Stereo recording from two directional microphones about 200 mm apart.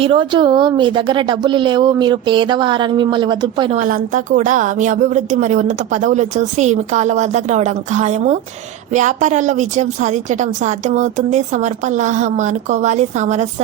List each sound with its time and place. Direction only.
0.0 s speech: 25° right (ahead or behind)
3.8 s a woman's voice: 40° right (ahead or behind)